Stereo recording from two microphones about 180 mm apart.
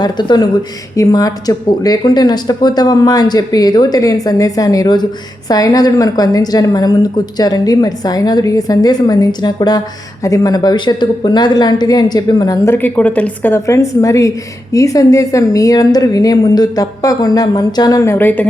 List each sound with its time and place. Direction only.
0.0 s a woman's voice: 25° left (ahead or behind)